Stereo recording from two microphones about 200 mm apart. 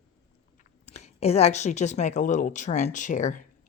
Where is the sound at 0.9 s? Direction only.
35° left (ahead or behind).